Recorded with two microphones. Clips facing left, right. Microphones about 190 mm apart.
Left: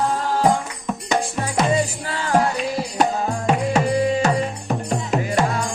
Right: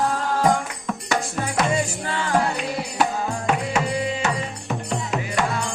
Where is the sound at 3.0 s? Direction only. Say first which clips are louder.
Left 3 dB; 35° left (ahead or behind).